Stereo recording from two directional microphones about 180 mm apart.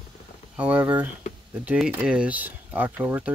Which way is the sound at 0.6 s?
10° right (ahead or behind).